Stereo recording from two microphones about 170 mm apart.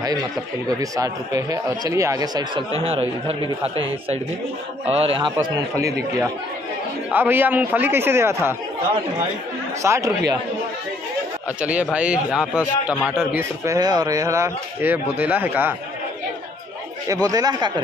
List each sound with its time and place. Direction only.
0.7 s speech: 20° right (ahead or behind)
4.8 s a man's voice: 35° right (ahead or behind)
7.1 s a man's voice: 10° right (ahead or behind)
9.8 s a man's voice: 15° right (ahead or behind)
11.6 s a man's voice: 10° right (ahead or behind)
13.4 s a man's voice: 20° right (ahead or behind)
17.1 s speech: 20° right (ahead or behind)